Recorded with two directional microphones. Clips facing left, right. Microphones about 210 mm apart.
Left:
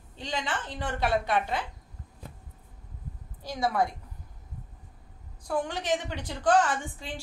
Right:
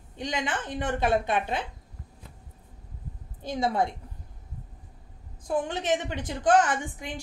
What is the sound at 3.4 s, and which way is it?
Speech, 20° right (ahead or behind).